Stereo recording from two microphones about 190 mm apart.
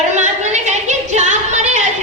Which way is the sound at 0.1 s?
40° right (ahead or behind).